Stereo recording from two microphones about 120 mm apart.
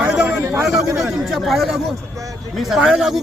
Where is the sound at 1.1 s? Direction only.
Centre (ahead or behind).